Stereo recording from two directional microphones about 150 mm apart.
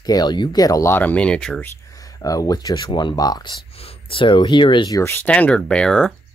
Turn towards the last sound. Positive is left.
turn(degrees=5)  # may be behind; listen again after turning